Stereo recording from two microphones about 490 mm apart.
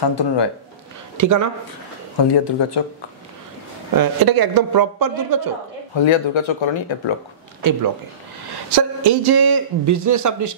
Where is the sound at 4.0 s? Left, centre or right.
Right.